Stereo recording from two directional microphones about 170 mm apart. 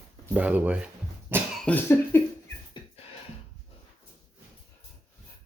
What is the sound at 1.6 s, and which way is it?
Cough, 10° left (ahead or behind).